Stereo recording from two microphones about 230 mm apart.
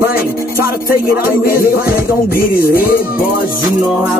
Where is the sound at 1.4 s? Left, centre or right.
Left.